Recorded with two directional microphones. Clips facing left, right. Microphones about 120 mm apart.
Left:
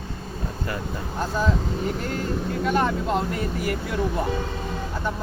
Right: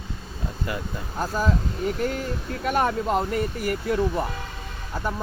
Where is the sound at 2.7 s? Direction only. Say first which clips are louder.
Right 2 dB; 10° right (ahead or behind).